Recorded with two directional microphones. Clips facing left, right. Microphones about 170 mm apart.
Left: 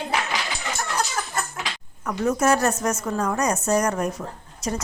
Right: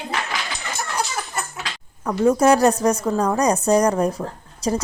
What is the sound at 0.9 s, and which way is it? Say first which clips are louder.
Chicken: right 1 dB; 10° right (ahead or behind).